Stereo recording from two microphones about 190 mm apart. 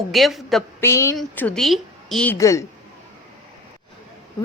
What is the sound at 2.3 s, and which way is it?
Speech, 15° left (ahead or behind).